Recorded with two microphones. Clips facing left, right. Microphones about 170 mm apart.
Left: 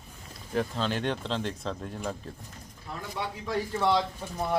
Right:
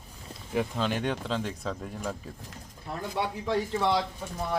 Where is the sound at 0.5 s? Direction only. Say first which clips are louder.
Right 1 dB; 10° right (ahead or behind).